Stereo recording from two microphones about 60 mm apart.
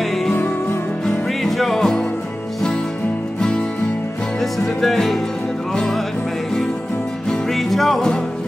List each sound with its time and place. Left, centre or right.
0.0 s music: centre
0.3 s music: left
1.0 s music: centre
3.3 s music: centre
7.2 s music: centre